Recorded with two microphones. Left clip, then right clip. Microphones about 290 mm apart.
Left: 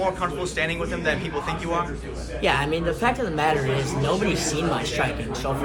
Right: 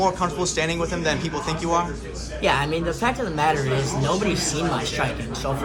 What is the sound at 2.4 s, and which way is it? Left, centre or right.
A man's voice, centre.